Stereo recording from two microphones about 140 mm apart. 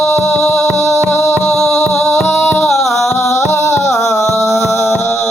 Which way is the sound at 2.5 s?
Centre (ahead or behind).